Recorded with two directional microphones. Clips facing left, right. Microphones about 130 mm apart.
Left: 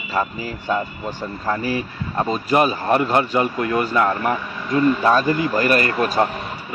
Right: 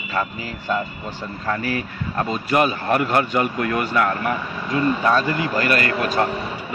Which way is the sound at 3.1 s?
25° left (ahead or behind).